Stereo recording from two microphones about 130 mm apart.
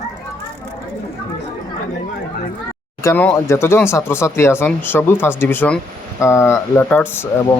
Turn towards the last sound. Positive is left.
turn(degrees=15)  # may be behind; listen again after turning